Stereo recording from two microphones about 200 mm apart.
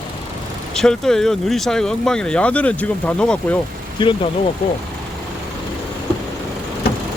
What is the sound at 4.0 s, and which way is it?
Speech, 25° left (ahead or behind).